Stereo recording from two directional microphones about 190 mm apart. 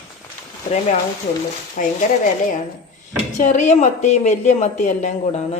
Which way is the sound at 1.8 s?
45° left (ahead or behind).